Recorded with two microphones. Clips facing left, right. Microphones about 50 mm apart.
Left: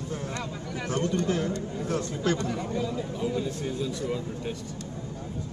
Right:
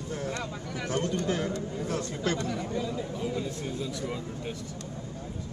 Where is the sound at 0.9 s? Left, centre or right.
Right.